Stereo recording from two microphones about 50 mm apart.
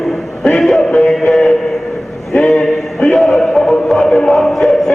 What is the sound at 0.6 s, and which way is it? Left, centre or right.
Speech, centre.